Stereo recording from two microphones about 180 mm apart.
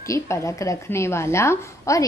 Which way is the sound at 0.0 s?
15° left (ahead or behind).